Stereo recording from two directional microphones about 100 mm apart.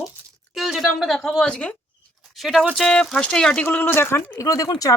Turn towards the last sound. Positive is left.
turn(degrees=35)  # may be behind; listen again after turning